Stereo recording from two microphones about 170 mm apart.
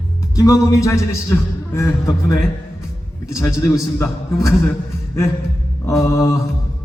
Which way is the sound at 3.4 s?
20° left (ahead or behind).